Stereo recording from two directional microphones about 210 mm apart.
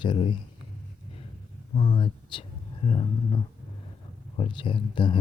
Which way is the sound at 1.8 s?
25° left (ahead or behind).